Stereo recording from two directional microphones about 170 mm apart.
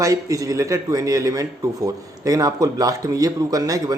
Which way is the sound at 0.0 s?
20° right (ahead or behind).